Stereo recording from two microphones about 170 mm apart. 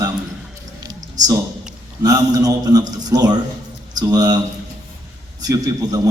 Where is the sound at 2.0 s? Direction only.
20° right (ahead or behind).